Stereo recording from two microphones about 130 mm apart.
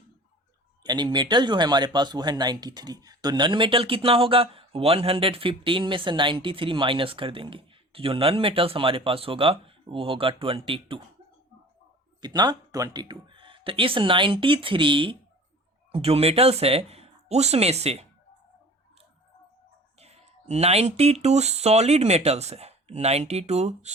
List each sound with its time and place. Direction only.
0.9 s speech: 35° right (ahead or behind)
12.2 s speech: 30° right (ahead or behind); by 18.0 s 55° right (ahead or behind)
20.0 s speech: 55° right (ahead or behind)